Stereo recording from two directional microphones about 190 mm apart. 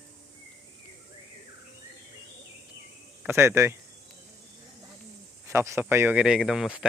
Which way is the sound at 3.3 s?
15° right (ahead or behind).